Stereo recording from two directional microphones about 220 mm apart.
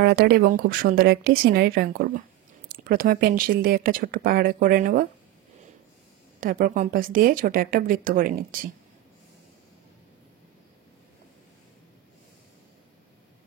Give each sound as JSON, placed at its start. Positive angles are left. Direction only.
{"t": 0.0, "sound": "speech", "side_deg": -45}
{"t": 6.4, "sound": "speech", "side_deg": -40}